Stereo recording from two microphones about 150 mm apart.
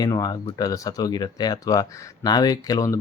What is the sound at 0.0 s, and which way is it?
Speech, 25° left (ahead or behind).